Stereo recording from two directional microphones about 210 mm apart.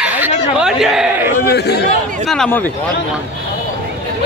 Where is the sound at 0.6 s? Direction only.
Centre (ahead or behind).